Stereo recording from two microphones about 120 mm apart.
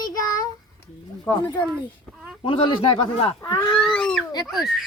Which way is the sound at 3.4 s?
25° left (ahead or behind).